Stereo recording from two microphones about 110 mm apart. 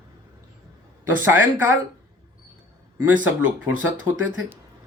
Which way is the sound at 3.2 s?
15° right (ahead or behind).